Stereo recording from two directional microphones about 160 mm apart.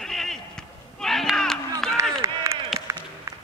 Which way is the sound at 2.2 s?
20° right (ahead or behind).